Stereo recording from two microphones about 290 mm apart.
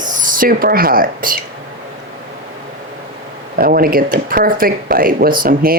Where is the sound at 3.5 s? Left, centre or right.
Right.